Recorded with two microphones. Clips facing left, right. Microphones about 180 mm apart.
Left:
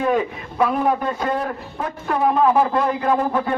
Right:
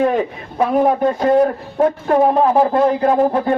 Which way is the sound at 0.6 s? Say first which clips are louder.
Right 5 dB; 35° right (ahead or behind).